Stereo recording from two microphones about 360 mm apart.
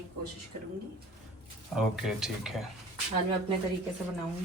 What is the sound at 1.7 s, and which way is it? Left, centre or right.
Speech, centre.